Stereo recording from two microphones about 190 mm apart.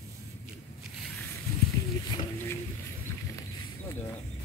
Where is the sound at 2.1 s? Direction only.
20° left (ahead or behind).